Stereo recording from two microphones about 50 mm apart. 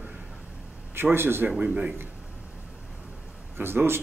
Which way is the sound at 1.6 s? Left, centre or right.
Right.